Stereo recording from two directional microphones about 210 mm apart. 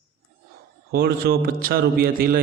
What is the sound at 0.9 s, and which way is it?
A man's voice, 50° right (ahead or behind).